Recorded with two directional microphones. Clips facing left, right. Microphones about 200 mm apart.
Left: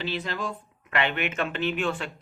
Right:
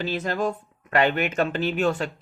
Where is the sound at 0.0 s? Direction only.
45° right (ahead or behind).